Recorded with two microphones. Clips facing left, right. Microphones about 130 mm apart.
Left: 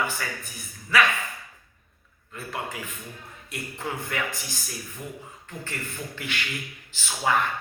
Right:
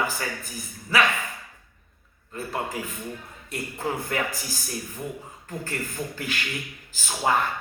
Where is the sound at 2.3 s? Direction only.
35° right (ahead or behind).